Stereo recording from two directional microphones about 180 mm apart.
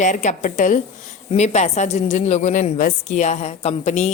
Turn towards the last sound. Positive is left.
turn(degrees=40)  # may be behind; listen again after turning